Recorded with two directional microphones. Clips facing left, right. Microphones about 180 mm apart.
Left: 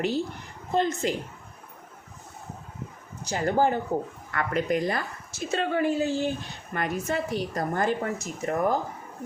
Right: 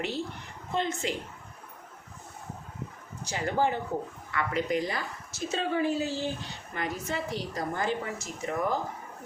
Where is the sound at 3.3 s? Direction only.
40° left (ahead or behind).